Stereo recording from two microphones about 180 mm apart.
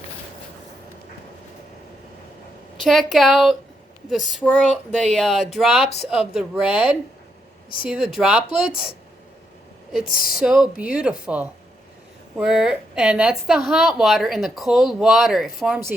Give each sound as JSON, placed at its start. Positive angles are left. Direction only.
{"t": 2.8, "sound": "a woman's voice", "side_deg": 0}
{"t": 10.1, "sound": "speech", "side_deg": 55}
{"t": 10.4, "sound": "a woman's voice", "side_deg": -5}